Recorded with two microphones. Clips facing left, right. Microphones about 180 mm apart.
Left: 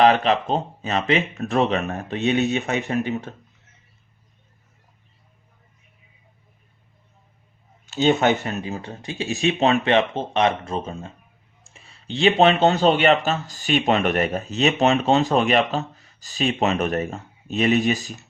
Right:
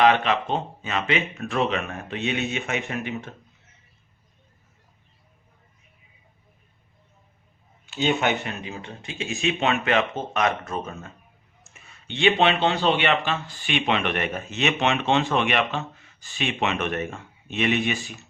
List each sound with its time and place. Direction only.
0.0 s speech: 35° left (ahead or behind)
7.9 s speech: 40° left (ahead or behind)